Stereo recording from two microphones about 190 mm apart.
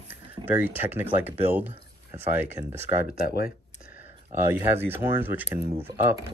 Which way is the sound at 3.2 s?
50° left (ahead or behind).